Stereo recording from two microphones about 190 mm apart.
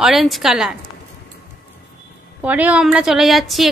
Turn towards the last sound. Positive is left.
turn(degrees=0)  # may be behind; listen again after turning